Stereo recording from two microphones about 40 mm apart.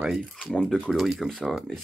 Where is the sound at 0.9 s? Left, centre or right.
Centre.